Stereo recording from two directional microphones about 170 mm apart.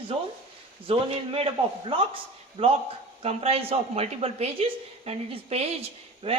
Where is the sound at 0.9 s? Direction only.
30° right (ahead or behind).